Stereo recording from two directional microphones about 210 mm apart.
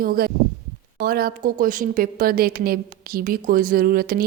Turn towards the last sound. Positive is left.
turn(degrees=-45)  # may be behind; listen again after turning